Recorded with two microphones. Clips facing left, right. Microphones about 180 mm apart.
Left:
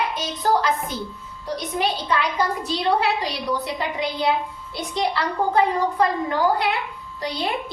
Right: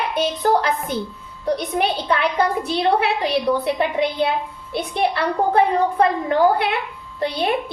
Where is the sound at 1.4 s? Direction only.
60° right (ahead or behind).